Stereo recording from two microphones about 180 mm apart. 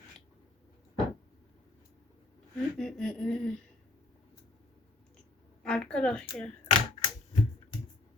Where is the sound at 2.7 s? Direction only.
5° left (ahead or behind).